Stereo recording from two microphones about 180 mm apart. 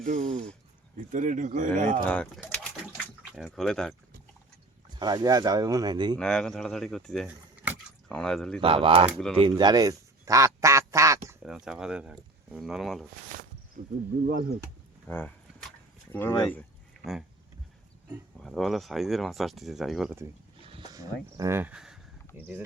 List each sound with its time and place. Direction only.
0.0 s speech: 45° right (ahead or behind)
2.0 s speech: 5° left (ahead or behind)
4.9 s speech: 25° right (ahead or behind)
6.1 s speech: 5° left (ahead or behind)
7.3 s a sound: 10° right (ahead or behind)
8.1 s speech: 5° left (ahead or behind)
8.6 s speech: 30° right (ahead or behind)
9.0 s speech: centre (ahead or behind)
9.3 s quack: 25° right (ahead or behind)
11.4 s speech: 5° right (ahead or behind)
14.3 s speech: 50° right (ahead or behind)
15.0 s speech: 10° left (ahead or behind)
18.3 s speech: centre (ahead or behind)
20.6 s speech: 25° right (ahead or behind)